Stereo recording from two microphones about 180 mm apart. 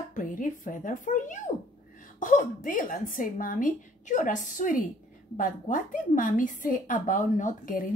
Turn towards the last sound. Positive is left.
turn(degrees=45)  # may be behind; listen again after turning